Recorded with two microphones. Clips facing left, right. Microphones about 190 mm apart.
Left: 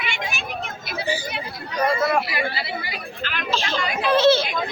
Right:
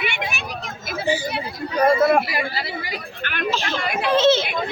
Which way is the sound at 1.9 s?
50° right (ahead or behind).